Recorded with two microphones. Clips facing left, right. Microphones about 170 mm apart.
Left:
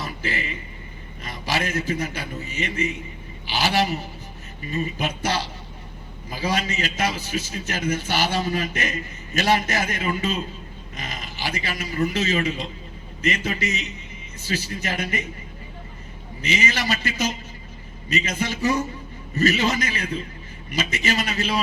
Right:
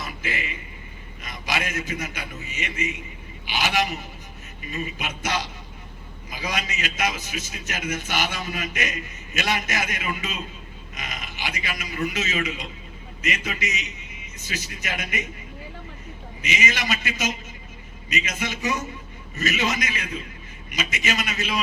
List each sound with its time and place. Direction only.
0.0 s a sound: 35° left (ahead or behind)
1.2 s a man's voice: 35° left (ahead or behind)
16.4 s a man's voice: 35° left (ahead or behind)